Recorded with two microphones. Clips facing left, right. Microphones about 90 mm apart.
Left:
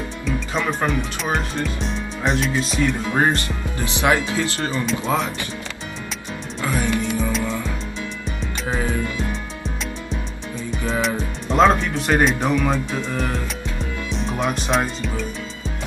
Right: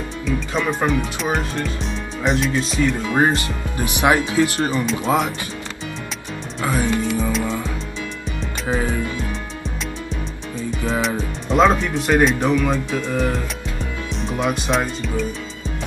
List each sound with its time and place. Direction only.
0.2 s speech: centre (ahead or behind)
4.0 s speech: 20° right (ahead or behind)
4.8 s speech: centre (ahead or behind)
6.6 s speech: 25° right (ahead or behind)
7.2 s music: centre (ahead or behind)
8.8 s music: 35° right (ahead or behind)
10.0 s speech: centre (ahead or behind)